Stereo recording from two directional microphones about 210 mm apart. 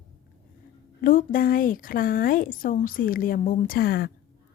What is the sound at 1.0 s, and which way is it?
A woman's voice, 40° left (ahead or behind).